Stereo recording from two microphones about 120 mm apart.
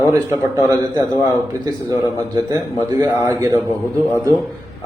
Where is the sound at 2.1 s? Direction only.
25° right (ahead or behind).